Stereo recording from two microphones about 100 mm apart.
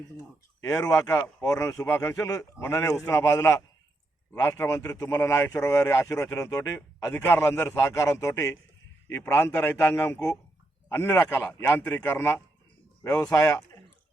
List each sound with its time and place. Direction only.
0.6 s speech: 30° left (ahead or behind)
7.1 s speech: 25° left (ahead or behind)
13.1 s speech: 30° left (ahead or behind)